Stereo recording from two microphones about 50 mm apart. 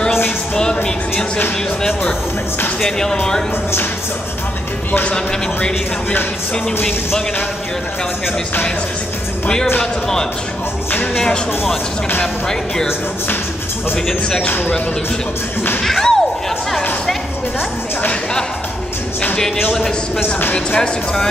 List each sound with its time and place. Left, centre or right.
1.8 s speech: centre
12.2 s speech: centre
15.8 s music: centre
20.5 s speech: left